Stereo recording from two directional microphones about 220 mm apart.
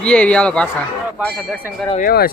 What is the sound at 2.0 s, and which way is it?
Speech, 40° left (ahead or behind).